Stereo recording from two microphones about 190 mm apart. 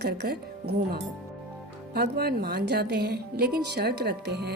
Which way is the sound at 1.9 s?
55° right (ahead or behind).